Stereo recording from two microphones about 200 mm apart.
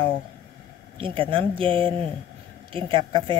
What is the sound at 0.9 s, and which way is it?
A woman's voice, 25° right (ahead or behind).